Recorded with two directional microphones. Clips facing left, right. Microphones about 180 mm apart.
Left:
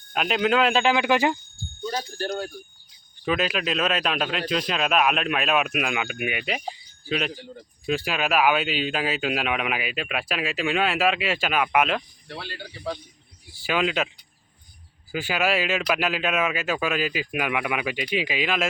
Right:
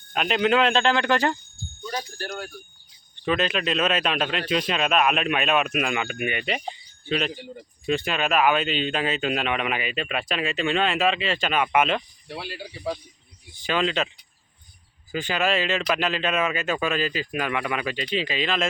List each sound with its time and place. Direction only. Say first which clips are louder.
0.1 s speech: right 1 dB; centre (ahead or behind)
2.0 s speech: left 4 dB; 25° left (ahead or behind)
3.2 s speech: right 1 dB; 5° left (ahead or behind)
13.5 s speech: even; 5° left (ahead or behind)
15.1 s speech: even; 5° left (ahead or behind)